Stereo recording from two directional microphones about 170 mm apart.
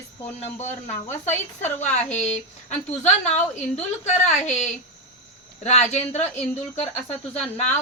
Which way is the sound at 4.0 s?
40° left (ahead or behind).